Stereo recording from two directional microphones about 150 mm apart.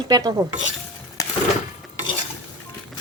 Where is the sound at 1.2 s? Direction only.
20° left (ahead or behind).